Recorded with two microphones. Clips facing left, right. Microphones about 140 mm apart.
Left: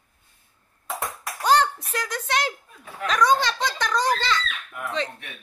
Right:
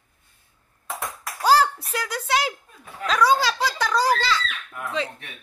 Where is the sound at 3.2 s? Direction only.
5° right (ahead or behind).